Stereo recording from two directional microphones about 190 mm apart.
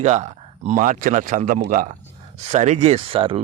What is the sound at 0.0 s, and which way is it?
Speech, 40° right (ahead or behind).